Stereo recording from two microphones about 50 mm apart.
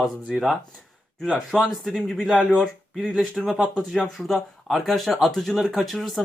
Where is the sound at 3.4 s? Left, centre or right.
Centre.